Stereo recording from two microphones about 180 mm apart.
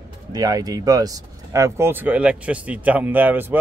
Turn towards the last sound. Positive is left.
turn(degrees=-10)  # may be behind; listen again after turning